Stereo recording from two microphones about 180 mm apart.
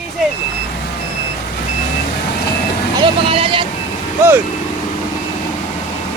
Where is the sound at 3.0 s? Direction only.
30° right (ahead or behind).